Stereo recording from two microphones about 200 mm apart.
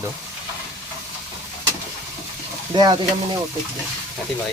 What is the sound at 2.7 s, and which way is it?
Speech, 20° right (ahead or behind).